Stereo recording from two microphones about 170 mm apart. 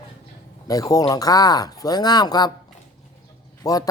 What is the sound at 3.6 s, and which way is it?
Speech, 20° left (ahead or behind).